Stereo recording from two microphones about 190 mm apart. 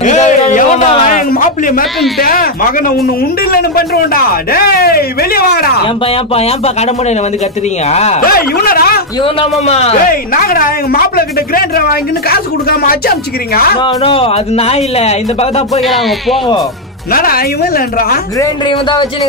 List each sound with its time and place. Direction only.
0.0 s a sound: 40° left (ahead or behind)
2.2 s a woman's voice: 50° left (ahead or behind)
6.0 s a man's voice: 30° left (ahead or behind)
8.3 s speech: 50° left (ahead or behind)
9.2 s a woman's voice: 35° left (ahead or behind); by 13.1 s 55° left (ahead or behind)
13.7 s a man's voice: 30° left (ahead or behind)
15.8 s speech: centre (ahead or behind)
17.1 s a woman's voice: 50° left (ahead or behind)
18.4 s speech: 25° left (ahead or behind)